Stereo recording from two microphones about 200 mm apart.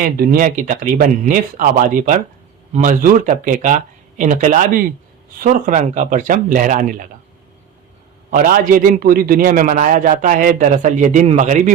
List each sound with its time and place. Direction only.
0.0 s a man's voice: 45° right (ahead or behind)
8.3 s a man's voice: 45° right (ahead or behind)